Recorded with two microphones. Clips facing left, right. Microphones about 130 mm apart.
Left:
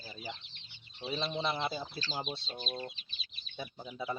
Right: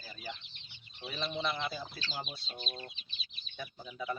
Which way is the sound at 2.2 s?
Centre (ahead or behind).